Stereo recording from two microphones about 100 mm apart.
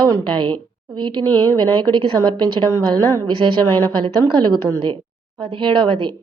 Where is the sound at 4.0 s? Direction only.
50° right (ahead or behind).